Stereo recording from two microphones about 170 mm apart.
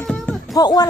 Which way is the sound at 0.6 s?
20° left (ahead or behind).